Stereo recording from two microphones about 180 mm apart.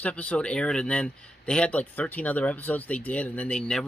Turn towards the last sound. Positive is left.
turn(degrees=5)  # may be behind; listen again after turning